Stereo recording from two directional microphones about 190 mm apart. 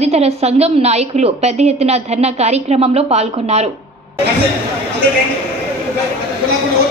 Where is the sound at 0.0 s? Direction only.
35° right (ahead or behind).